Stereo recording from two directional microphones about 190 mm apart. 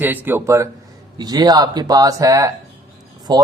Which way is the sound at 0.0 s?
10° right (ahead or behind).